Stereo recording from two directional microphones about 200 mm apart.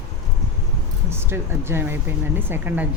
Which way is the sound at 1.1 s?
10° right (ahead or behind).